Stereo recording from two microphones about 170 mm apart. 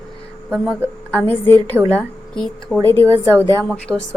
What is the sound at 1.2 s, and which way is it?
A woman's voice, 10° left (ahead or behind).